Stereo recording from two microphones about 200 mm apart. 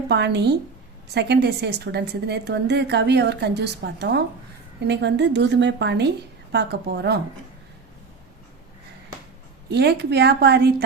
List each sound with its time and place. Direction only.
0.1 s a woman's voice: 60° right (ahead or behind)
9.6 s a woman's voice: 55° right (ahead or behind)